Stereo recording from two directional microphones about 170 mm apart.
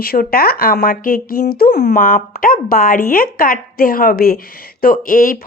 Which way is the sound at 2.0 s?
55° left (ahead or behind).